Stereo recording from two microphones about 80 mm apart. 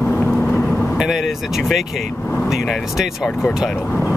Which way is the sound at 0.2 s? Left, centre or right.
Centre.